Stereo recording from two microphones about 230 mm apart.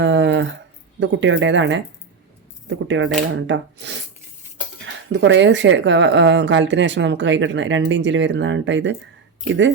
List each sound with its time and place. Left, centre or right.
0.0 s a sound: right
0.9 s speech: right
5.1 s speech: right